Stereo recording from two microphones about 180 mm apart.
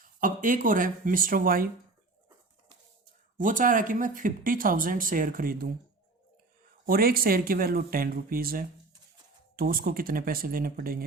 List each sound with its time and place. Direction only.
0.0 s speech: 50° right (ahead or behind)
3.3 s speech: 45° right (ahead or behind)
6.8 s speech: 55° right (ahead or behind)